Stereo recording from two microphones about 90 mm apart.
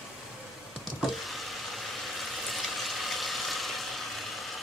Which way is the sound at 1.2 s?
Centre (ahead or behind).